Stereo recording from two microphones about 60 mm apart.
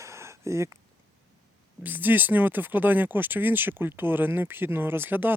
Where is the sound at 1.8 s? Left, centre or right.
Right.